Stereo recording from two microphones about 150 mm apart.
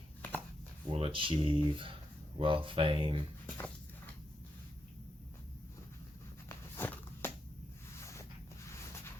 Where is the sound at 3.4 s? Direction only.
15° left (ahead or behind).